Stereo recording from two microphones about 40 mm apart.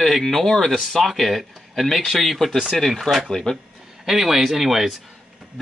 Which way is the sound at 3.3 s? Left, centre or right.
Centre.